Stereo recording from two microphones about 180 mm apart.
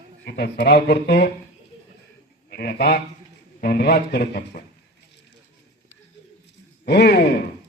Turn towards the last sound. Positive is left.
turn(degrees=65)  # may be behind; listen again after turning